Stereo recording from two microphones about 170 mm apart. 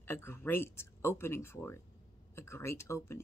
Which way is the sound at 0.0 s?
15° left (ahead or behind).